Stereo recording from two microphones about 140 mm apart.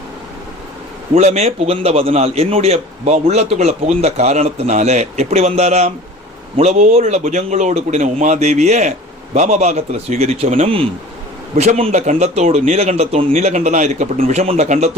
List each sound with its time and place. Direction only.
1.1 s a man's voice: 55° right (ahead or behind)
11.5 s a man's voice: 50° right (ahead or behind)